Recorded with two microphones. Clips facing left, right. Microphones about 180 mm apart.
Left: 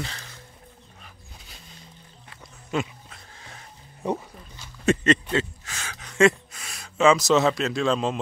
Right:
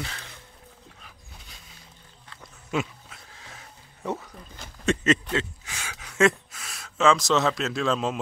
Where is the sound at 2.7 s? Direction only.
5° right (ahead or behind).